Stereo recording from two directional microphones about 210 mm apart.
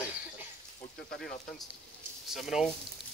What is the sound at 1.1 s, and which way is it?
Speech, centre (ahead or behind).